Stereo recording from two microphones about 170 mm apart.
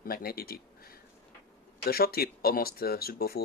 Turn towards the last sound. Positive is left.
turn(degrees=65)  # may be behind; listen again after turning